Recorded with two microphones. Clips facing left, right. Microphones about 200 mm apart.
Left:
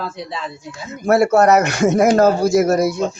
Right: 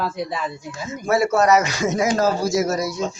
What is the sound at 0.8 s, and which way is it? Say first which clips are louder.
Speech: left 5 dB; 60° left (ahead or behind).